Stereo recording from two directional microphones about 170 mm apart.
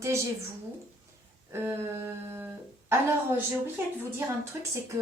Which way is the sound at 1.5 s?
15° right (ahead or behind).